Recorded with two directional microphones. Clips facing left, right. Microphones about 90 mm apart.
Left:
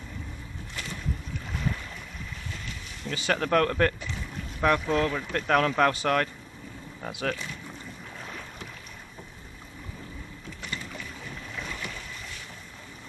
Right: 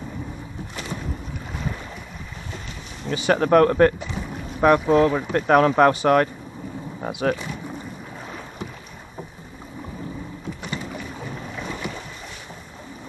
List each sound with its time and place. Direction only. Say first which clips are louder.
0.7 s boat: right 6 dB; 20° right (ahead or behind)
2.5 s speech: right 4 dB; 20° right (ahead or behind)
10.6 s boat: right 4 dB; 20° right (ahead or behind)